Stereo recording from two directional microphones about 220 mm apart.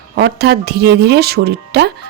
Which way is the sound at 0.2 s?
50° right (ahead or behind).